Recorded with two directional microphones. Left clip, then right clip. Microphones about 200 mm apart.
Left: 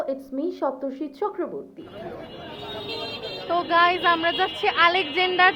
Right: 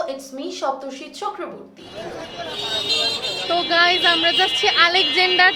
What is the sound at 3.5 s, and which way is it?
Speech, 5° right (ahead or behind).